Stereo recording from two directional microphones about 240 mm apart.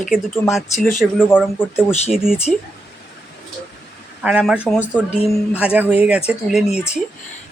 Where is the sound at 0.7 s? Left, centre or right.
Left.